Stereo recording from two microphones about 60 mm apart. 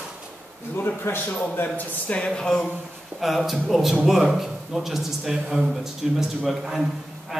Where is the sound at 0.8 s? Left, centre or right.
Left.